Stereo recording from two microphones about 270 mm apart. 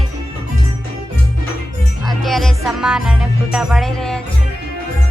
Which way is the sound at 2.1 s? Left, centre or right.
Centre.